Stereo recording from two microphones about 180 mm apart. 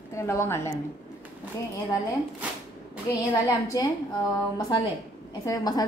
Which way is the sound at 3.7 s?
20° left (ahead or behind).